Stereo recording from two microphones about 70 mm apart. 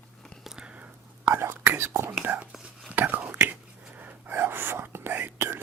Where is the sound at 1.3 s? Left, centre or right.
Right.